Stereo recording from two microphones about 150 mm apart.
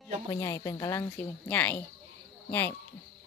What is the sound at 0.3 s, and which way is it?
Speech, 20° left (ahead or behind).